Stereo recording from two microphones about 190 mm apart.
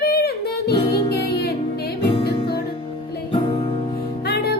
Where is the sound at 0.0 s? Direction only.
55° left (ahead or behind).